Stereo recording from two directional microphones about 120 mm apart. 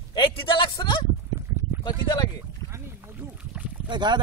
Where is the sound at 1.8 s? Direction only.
35° left (ahead or behind).